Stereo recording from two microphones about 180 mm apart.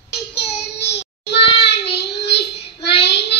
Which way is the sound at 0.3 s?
70° left (ahead or behind).